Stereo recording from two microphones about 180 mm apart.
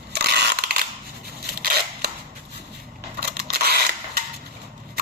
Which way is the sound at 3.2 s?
60° right (ahead or behind).